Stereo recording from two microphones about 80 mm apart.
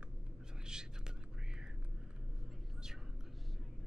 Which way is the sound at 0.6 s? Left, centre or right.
Centre.